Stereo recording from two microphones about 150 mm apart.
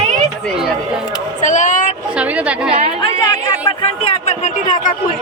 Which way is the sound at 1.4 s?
55° left (ahead or behind).